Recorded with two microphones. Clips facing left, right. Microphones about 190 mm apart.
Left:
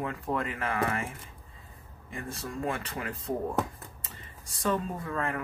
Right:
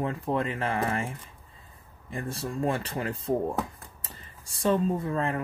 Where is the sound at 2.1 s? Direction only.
30° right (ahead or behind).